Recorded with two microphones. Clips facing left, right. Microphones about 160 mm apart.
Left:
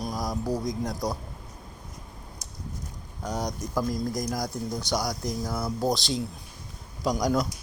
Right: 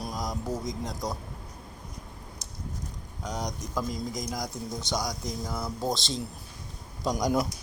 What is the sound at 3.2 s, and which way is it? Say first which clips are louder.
Speech: left 3 dB; 5° left (ahead or behind).